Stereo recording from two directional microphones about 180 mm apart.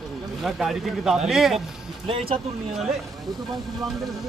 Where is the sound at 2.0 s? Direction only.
35° right (ahead or behind).